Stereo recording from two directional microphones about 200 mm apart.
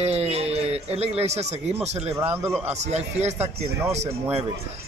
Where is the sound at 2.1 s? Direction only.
15° right (ahead or behind).